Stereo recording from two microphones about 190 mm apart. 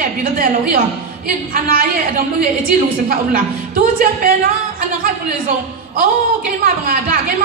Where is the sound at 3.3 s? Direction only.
50° right (ahead or behind).